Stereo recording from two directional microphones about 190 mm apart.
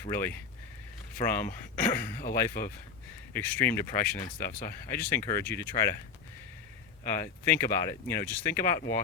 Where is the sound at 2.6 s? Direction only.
50° left (ahead or behind).